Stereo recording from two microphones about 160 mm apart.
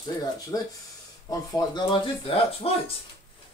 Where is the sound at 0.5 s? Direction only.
20° left (ahead or behind).